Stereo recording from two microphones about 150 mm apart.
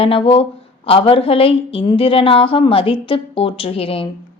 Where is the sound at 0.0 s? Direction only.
40° left (ahead or behind).